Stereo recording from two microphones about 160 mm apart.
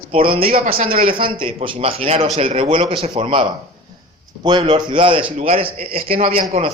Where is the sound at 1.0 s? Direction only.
35° right (ahead or behind).